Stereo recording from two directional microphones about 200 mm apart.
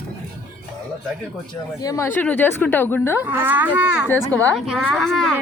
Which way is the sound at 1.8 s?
15° left (ahead or behind).